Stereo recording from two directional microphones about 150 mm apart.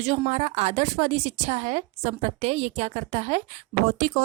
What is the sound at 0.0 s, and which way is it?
A woman's voice, 45° right (ahead or behind).